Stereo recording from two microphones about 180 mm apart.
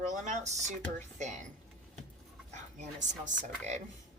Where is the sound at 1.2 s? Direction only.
40° right (ahead or behind).